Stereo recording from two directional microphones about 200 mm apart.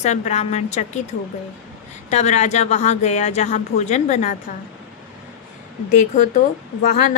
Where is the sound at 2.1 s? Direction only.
35° left (ahead or behind).